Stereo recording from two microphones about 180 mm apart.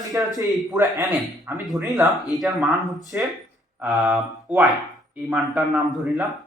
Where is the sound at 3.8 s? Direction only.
5° right (ahead or behind).